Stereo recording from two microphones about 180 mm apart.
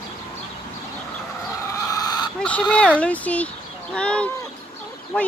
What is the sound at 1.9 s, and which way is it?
Chicken, 20° left (ahead or behind).